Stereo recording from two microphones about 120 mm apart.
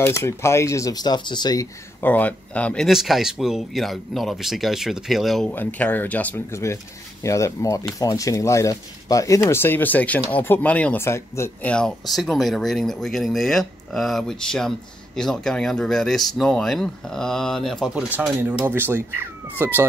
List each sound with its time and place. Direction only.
0.0 s speech: 20° left (ahead or behind)
2.0 s speech: 15° left (ahead or behind)
2.9 s speech: 5° right (ahead or behind)
5.5 s speech: 15° left (ahead or behind)
11.6 s speech: 10° left (ahead or behind)
18.1 s speech: 15° right (ahead or behind)